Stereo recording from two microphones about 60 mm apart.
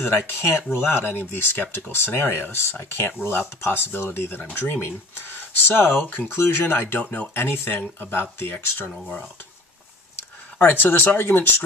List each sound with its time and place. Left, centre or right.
0.0 s speech: left
4.4 s speech: left
5.7 s speech: left
10.6 s speech: left